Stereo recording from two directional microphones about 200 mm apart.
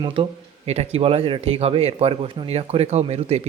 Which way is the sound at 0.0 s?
25° right (ahead or behind).